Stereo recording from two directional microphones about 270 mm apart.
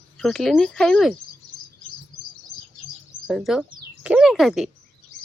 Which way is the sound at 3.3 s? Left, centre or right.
Centre.